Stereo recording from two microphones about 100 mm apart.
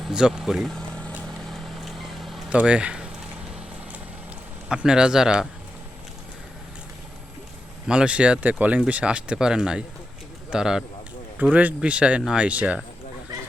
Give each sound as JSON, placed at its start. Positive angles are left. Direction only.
{"t": 0.0, "sound": "speech", "side_deg": -5}
{"t": 1.5, "sound": "vehicle", "side_deg": 0}
{"t": 2.5, "sound": "speech", "side_deg": -10}
{"t": 4.7, "sound": "speech", "side_deg": -10}
{"t": 7.9, "sound": "speech", "side_deg": -10}